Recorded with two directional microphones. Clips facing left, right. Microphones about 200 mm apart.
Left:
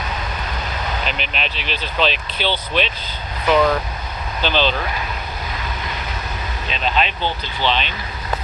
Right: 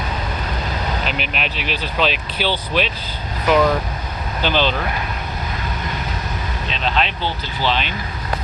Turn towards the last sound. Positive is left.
turn(degrees=-5)  # may be behind; listen again after turning